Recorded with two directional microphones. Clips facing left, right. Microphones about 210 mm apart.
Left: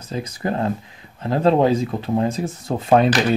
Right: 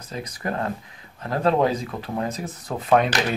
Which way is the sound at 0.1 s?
25° left (ahead or behind).